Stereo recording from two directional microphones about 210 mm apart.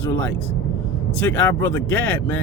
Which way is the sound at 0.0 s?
10° left (ahead or behind).